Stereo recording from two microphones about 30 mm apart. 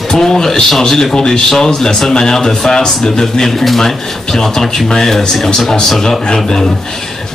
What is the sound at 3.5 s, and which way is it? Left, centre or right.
Speech, centre.